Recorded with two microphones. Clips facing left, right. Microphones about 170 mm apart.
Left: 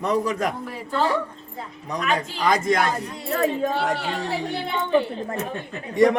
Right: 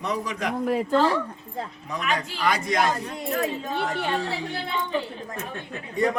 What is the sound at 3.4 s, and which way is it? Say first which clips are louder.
Speech: left 7 dB; 80° left.